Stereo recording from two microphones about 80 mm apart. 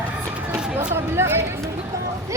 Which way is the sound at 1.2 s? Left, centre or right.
Right.